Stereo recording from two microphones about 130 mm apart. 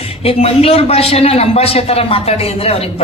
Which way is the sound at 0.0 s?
50° left (ahead or behind).